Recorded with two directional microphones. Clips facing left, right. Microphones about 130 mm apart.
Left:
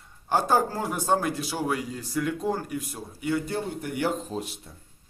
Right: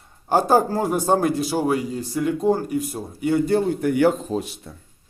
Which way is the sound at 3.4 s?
90° right.